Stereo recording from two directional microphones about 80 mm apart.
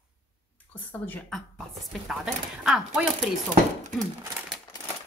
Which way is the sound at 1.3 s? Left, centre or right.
Centre.